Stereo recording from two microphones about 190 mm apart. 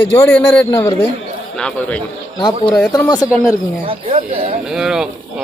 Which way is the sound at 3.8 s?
30° right (ahead or behind).